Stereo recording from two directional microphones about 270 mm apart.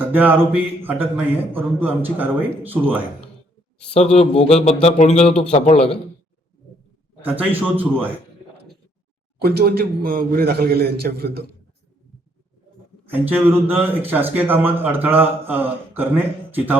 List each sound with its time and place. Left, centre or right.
0.0 s speech: centre
3.9 s a man's voice: left
7.2 s speech: centre
9.4 s a man's voice: right
13.1 s speech: centre